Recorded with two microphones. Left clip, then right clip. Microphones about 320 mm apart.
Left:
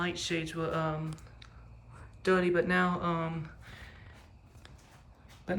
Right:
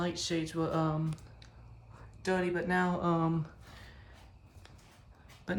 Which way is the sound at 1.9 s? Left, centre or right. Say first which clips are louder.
Left 5 dB; right.